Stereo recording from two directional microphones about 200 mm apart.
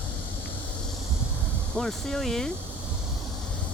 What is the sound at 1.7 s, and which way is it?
Speech, centre (ahead or behind).